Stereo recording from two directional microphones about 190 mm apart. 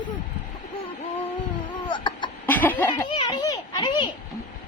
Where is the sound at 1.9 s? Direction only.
25° left (ahead or behind).